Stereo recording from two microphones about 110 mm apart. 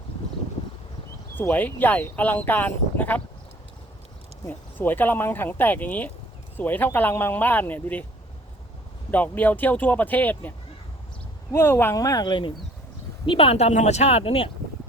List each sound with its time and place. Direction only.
1.4 s speech: 15° left (ahead or behind)
4.4 s speech: 20° left (ahead or behind)
9.1 s speech: 15° left (ahead or behind)
11.5 s speech: 20° left (ahead or behind)
11.9 s speech: 30° left (ahead or behind)
13.2 s speech: 55° left (ahead or behind)